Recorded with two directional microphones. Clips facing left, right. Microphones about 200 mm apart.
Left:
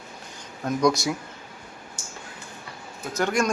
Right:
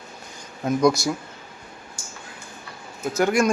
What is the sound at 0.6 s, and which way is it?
Speech, 5° right (ahead or behind).